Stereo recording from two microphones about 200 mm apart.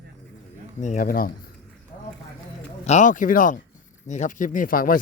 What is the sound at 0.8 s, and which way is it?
Speech, 40° left (ahead or behind).